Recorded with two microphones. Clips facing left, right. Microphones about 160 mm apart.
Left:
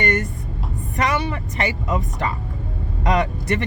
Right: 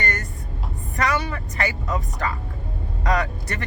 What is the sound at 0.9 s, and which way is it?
A woman's voice, 20° left (ahead or behind).